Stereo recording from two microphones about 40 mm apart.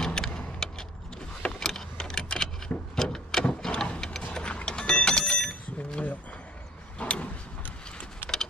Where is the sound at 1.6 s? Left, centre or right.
Centre.